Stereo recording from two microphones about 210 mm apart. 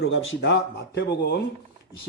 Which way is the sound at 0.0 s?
65° left (ahead or behind).